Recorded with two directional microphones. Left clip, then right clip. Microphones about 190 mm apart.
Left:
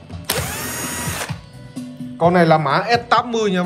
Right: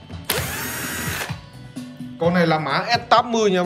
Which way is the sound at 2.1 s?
25° left (ahead or behind).